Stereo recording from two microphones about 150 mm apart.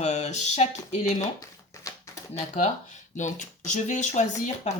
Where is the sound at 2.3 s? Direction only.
45° left (ahead or behind).